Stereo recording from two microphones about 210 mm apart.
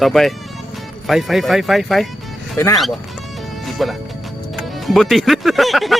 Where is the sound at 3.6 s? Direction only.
Centre (ahead or behind).